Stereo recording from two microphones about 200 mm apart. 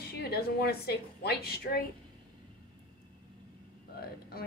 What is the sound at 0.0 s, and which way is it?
A woman's voice, 50° left (ahead or behind).